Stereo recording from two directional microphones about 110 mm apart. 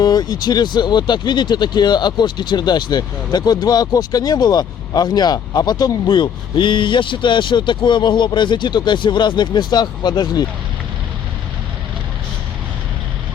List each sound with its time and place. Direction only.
0.0 s speech: 35° left (ahead or behind)